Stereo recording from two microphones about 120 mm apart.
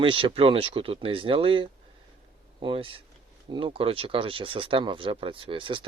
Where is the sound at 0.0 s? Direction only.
50° right (ahead or behind).